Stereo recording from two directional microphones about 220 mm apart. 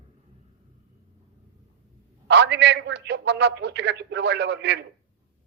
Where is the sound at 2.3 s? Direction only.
50° right (ahead or behind).